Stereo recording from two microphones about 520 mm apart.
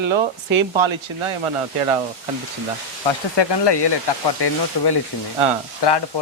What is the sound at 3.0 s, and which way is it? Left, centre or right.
Speech, left.